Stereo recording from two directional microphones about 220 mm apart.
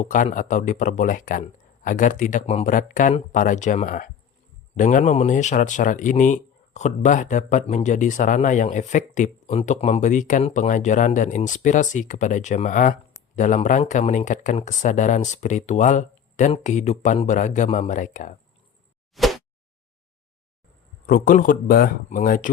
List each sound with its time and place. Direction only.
0.0 s speech: 35° left (ahead or behind)
19.1 s a sound: centre (ahead or behind)
21.1 s speech: 40° left (ahead or behind)